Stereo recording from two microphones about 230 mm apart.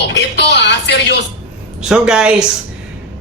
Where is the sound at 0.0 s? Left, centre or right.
Left.